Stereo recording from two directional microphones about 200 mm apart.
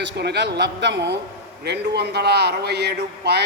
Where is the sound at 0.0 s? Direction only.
60° right (ahead or behind).